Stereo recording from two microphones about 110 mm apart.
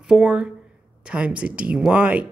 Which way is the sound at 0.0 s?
5° right (ahead or behind).